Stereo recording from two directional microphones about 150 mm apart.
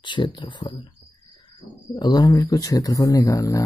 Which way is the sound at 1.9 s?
25° left (ahead or behind).